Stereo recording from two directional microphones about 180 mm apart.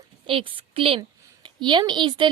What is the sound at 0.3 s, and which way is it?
A woman's voice, 30° right (ahead or behind).